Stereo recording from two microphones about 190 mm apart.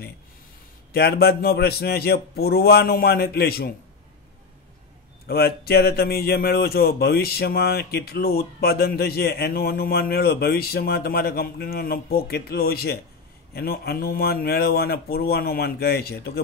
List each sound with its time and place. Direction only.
0.9 s speech: 55° left (ahead or behind)
5.3 s speech: 55° left (ahead or behind)